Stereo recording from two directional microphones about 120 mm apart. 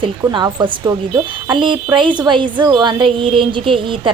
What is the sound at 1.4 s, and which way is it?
A woman's voice, 40° right (ahead or behind).